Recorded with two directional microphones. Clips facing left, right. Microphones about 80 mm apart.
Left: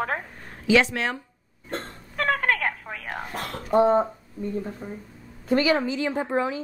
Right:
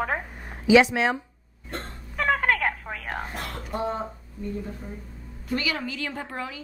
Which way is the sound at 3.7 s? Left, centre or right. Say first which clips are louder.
Left 11 dB; left.